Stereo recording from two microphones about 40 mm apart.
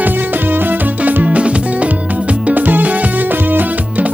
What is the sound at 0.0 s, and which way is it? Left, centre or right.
Music, right.